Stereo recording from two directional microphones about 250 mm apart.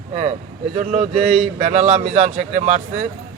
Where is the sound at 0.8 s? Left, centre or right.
Right.